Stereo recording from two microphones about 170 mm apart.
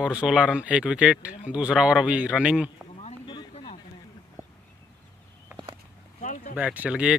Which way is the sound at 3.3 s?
30° left (ahead or behind).